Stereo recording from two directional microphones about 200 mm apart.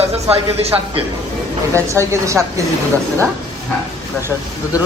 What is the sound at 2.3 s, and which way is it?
Speech, 15° right (ahead or behind).